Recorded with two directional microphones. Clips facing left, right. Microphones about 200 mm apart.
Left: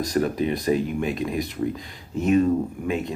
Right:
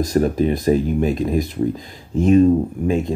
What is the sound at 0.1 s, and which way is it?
Speech, 40° right (ahead or behind).